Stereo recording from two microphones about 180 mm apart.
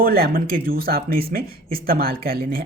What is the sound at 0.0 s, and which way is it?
Speech, 55° right (ahead or behind).